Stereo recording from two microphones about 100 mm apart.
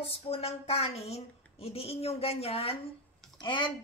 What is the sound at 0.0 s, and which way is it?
A woman's voice, 75° left (ahead or behind).